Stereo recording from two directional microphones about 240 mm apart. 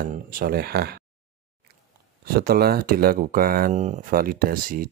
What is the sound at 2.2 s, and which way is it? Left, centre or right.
Speech, right.